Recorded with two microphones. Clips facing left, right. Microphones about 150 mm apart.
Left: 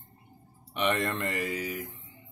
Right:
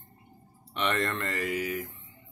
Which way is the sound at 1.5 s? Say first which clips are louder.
Right 3 dB; centre (ahead or behind).